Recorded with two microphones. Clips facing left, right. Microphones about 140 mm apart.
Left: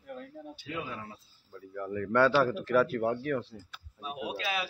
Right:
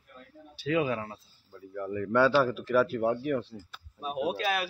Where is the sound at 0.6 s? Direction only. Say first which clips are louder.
Right 12 dB; 90° right.